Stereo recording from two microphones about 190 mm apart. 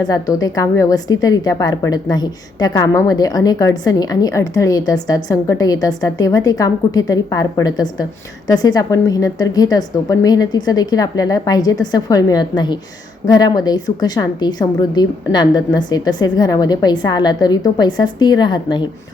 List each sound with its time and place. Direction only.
0.0 s a woman's voice: 20° left (ahead or behind)